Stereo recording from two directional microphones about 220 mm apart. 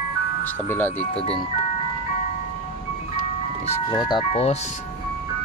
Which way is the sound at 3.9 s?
20° left (ahead or behind).